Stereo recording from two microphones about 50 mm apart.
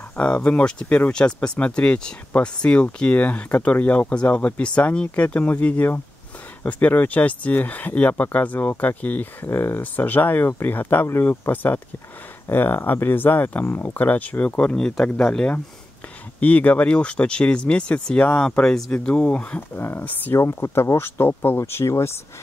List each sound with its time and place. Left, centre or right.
0.1 s speech: left
16.3 s speech: left
19.7 s speech: left
21.0 s speech: left